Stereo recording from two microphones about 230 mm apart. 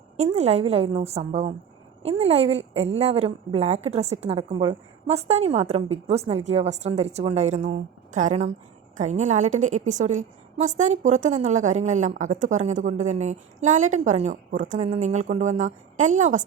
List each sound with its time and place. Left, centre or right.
0.2 s a woman's voice: right